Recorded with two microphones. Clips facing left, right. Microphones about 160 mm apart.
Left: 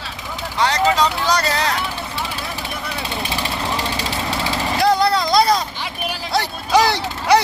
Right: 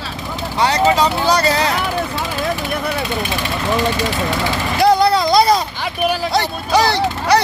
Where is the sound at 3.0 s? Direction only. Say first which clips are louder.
Right 4 dB; 30° left (ahead or behind).